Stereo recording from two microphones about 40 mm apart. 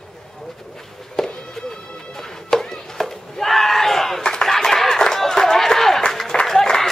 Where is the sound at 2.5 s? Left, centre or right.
Centre.